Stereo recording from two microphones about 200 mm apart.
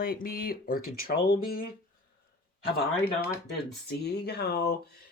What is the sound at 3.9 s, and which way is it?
Speech, 55° left (ahead or behind).